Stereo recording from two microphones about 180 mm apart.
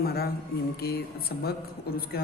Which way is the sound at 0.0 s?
60° left (ahead or behind).